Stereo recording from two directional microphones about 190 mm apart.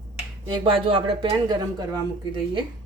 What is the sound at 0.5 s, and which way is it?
Speech, 25° right (ahead or behind).